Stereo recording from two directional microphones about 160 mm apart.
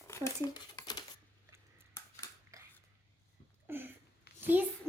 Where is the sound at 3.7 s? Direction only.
15° right (ahead or behind).